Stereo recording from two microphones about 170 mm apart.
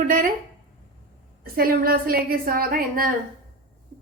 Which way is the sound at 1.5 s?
60° right (ahead or behind).